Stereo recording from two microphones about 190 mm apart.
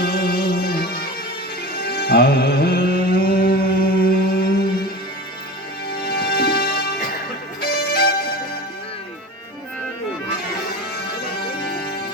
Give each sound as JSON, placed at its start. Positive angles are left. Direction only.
{"t": 0.0, "sound": "music", "side_deg": 50}
{"t": 6.1, "sound": "music", "side_deg": 55}